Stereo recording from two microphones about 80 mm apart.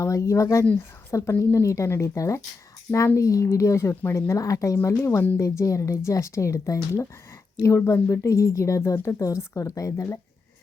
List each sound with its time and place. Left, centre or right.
0.0 s speech: left
7.8 s speech: left